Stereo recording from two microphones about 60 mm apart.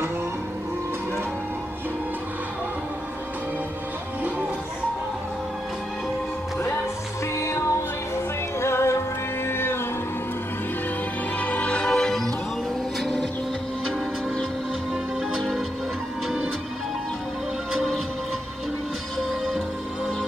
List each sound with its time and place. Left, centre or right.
8.5 s music: left
11.3 s music: left
11.9 s music: centre
17.7 s music: centre
19.1 s music: centre